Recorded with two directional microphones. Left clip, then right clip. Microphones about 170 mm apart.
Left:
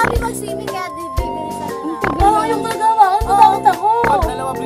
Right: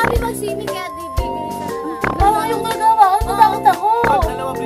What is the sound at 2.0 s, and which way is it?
Music, centre (ahead or behind).